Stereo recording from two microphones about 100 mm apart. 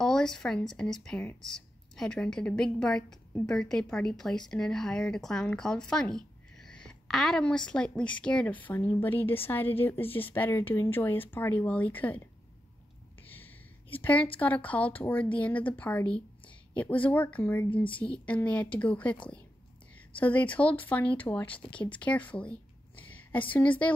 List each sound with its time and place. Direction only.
0.0 s speech: 5° left (ahead or behind)
13.3 s a sound: 20° left (ahead or behind)
15.0 s a woman's voice: 15° left (ahead or behind)
20.2 s speech: 15° left (ahead or behind)
21.9 s a sound: 15° left (ahead or behind)
23.5 s speech: 15° left (ahead or behind)